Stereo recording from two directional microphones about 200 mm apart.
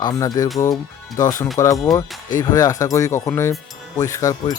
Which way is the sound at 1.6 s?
15° left (ahead or behind).